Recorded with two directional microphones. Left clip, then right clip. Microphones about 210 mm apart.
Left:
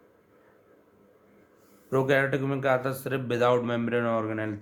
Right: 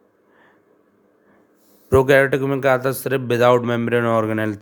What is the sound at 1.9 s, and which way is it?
Speech, 40° right (ahead or behind).